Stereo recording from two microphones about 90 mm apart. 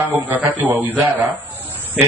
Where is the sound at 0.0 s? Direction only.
20° right (ahead or behind).